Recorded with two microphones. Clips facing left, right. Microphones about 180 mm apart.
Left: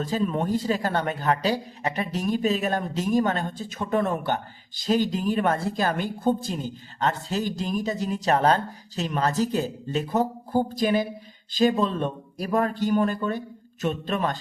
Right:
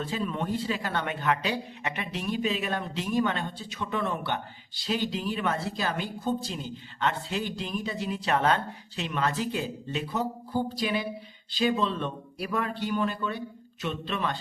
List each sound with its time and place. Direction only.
0.0 s a man's voice: 40° left (ahead or behind)